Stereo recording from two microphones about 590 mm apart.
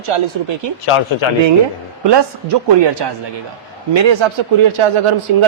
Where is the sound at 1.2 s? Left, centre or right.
Left.